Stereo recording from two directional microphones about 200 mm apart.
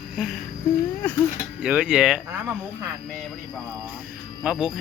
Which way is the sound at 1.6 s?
5° right (ahead or behind).